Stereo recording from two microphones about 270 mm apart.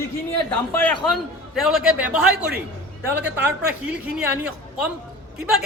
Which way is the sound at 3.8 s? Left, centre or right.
Centre.